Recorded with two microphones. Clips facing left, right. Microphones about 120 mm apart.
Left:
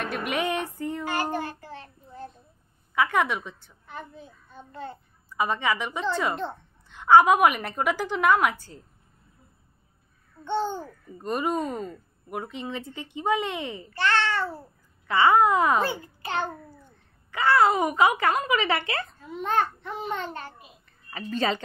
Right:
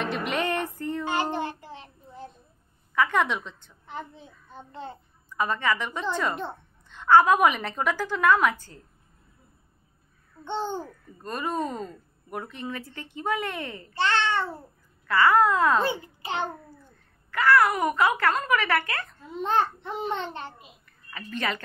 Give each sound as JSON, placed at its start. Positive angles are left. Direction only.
{"t": 0.3, "sound": "a woman's voice", "side_deg": 15}
{"t": 0.7, "sound": "child singing", "side_deg": 15}
{"t": 1.0, "sound": "child singing", "side_deg": -25}
{"t": 2.9, "sound": "a woman's voice", "side_deg": 10}
{"t": 3.8, "sound": "a child's voice", "side_deg": -25}
{"t": 5.4, "sound": "a woman's voice", "side_deg": 15}
{"t": 10.4, "sound": "a child's voice", "side_deg": -20}
{"t": 11.2, "sound": "a woman's voice", "side_deg": 20}
{"t": 13.9, "sound": "babbling", "side_deg": -20}
{"t": 15.0, "sound": "speech", "side_deg": 20}
{"t": 15.8, "sound": "a child's voice", "side_deg": -20}
{"t": 17.3, "sound": "speech", "side_deg": 25}
{"t": 19.4, "sound": "a child's voice", "side_deg": -25}
{"t": 21.1, "sound": "speech", "side_deg": 35}